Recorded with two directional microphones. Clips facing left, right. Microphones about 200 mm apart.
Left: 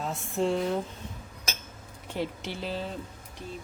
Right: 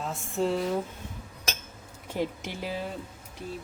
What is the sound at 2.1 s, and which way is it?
Speech, 15° right (ahead or behind).